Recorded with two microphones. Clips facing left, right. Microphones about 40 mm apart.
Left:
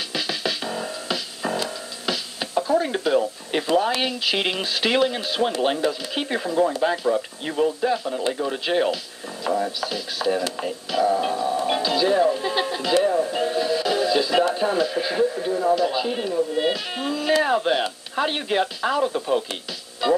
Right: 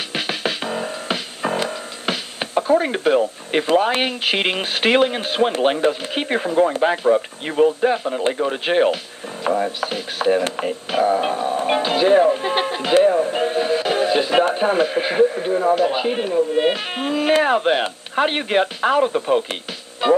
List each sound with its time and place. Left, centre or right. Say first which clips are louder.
0.1 s music: right 3 dB; right
3.5 s speech: right 4 dB; right
7.8 s speech: right 4 dB; right